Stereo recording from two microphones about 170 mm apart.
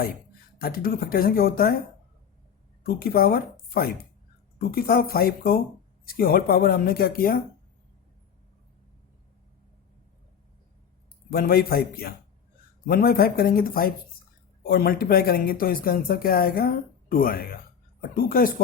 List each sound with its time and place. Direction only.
0.6 s speech: 60° left (ahead or behind)
2.8 s a woman's voice: 60° left (ahead or behind)
11.3 s speech: 60° left (ahead or behind)